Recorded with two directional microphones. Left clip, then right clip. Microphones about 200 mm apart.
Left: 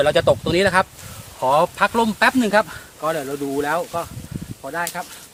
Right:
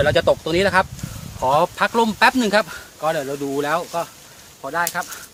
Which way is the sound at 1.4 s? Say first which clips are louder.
Left 1 dB; 10° right (ahead or behind).